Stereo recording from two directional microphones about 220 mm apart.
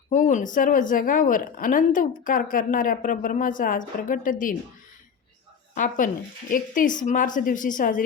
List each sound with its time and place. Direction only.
0.1 s a woman's voice: 35° left (ahead or behind)
5.7 s a woman's voice: 35° left (ahead or behind)